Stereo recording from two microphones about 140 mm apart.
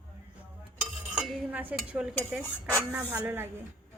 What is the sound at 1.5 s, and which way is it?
Speech, 10° right (ahead or behind).